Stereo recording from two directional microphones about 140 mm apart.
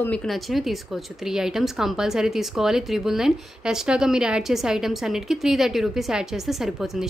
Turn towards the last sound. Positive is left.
turn(degrees=0)  # may be behind; listen again after turning